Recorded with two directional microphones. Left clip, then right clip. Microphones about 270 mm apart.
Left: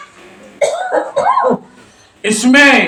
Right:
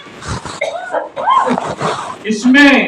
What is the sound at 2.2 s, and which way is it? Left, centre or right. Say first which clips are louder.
Speech: left 2 dB; left.